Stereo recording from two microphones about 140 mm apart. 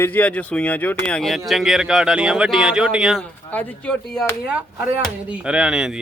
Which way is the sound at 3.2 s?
10° left (ahead or behind).